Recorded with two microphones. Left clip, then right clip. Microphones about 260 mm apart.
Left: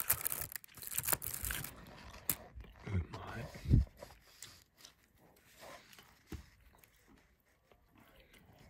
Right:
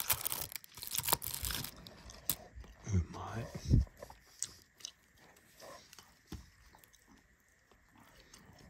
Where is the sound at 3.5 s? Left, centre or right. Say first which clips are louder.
Even; left.